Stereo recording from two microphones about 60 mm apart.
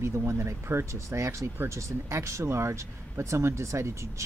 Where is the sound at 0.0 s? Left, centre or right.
Right.